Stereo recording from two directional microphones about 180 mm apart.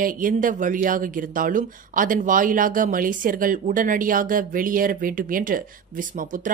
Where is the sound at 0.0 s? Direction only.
50° right (ahead or behind).